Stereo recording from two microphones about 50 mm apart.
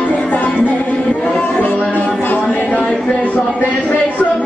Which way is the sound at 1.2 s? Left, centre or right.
Centre.